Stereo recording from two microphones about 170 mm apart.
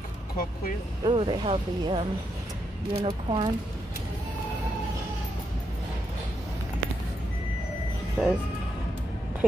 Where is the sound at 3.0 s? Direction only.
30° right (ahead or behind).